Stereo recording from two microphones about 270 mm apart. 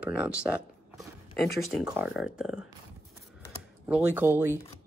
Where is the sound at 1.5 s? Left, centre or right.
Centre.